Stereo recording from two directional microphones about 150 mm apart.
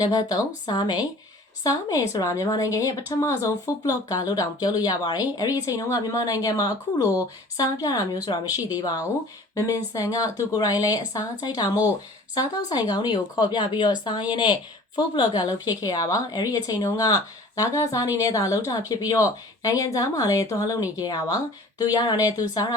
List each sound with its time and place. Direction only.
0.0 s speech: 25° left (ahead or behind)